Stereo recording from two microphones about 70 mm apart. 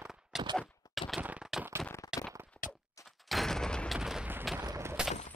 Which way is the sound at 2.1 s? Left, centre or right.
Centre.